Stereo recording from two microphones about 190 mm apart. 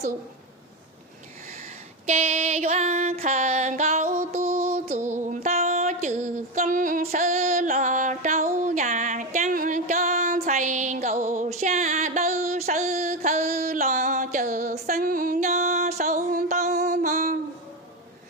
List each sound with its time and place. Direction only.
2.0 s music: 35° right (ahead or behind)